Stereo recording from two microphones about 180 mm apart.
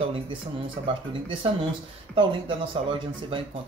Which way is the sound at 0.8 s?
25° right (ahead or behind).